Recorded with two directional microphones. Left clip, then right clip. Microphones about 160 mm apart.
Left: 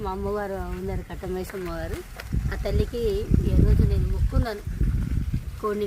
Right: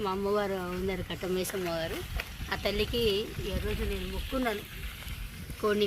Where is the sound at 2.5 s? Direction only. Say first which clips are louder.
Left 1 dB; 45° left (ahead or behind).